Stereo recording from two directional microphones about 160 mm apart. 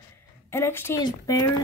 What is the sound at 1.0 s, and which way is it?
Speech, 25° left (ahead or behind).